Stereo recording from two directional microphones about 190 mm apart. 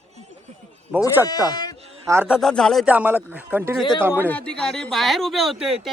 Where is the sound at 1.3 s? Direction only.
20° left (ahead or behind).